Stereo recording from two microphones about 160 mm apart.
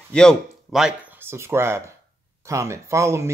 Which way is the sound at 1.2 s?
15° right (ahead or behind).